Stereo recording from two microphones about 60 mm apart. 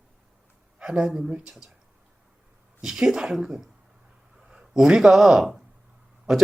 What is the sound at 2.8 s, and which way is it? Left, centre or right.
Speech, centre.